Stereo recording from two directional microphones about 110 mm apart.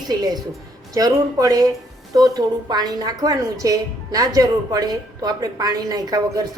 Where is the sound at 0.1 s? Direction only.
40° right (ahead or behind).